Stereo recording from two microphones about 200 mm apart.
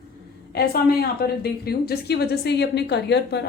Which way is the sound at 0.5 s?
50° left (ahead or behind).